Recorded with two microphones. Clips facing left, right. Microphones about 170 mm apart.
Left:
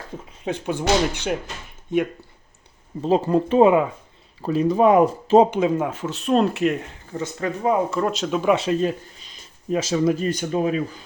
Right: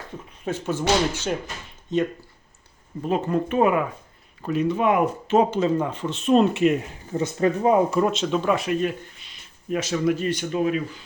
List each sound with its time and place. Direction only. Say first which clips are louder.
0.4 s speech: left 1 dB; 15° left (ahead or behind)
1.9 s speech: left 1 dB; 10° left (ahead or behind)
3.0 s speech: left 4 dB; 30° left (ahead or behind)
5.5 s speech: left 1 dB; 10° left (ahead or behind)
7.1 s speech: right 5 dB; 20° right (ahead or behind)
7.9 s speech: right 1 dB; centre (ahead or behind)
8.5 s speech: left 3 dB; 30° left (ahead or behind)